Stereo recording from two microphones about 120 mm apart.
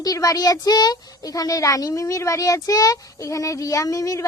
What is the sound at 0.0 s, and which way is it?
Speech, 30° left (ahead or behind).